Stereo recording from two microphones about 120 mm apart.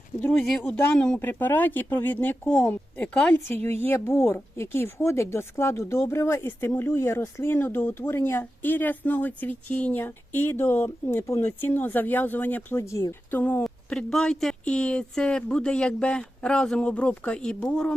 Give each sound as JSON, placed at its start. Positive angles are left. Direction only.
{"t": 0.4, "sound": "speech", "side_deg": 10}
{"t": 13.7, "sound": "speech", "side_deg": 5}